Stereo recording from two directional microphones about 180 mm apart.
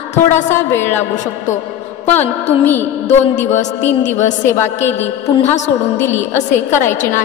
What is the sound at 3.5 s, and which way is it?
Speech, 40° left (ahead or behind).